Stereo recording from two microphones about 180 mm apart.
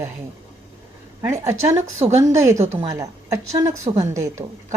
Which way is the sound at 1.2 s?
15° right (ahead or behind).